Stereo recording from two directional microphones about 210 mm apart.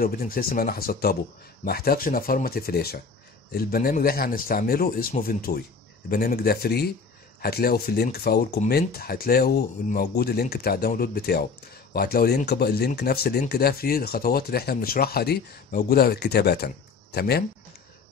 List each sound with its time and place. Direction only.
0.0 s speech: 45° left (ahead or behind)